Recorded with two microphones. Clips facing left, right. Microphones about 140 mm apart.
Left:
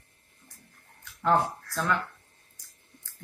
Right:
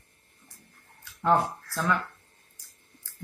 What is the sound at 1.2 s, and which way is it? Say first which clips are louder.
Speech: right 1 dB; 10° right (ahead or behind).